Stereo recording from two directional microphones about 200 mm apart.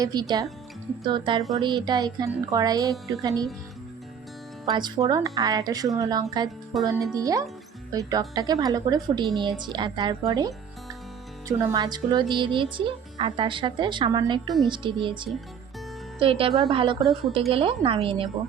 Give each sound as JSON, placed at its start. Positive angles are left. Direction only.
{"t": 0.0, "sound": "speech", "side_deg": -20}
{"t": 4.6, "sound": "speech", "side_deg": -20}
{"t": 6.7, "sound": "speech", "side_deg": 0}
{"t": 7.1, "sound": "speech", "side_deg": -15}